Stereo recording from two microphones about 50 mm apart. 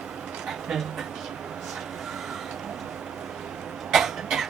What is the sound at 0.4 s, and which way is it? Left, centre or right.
Music, centre.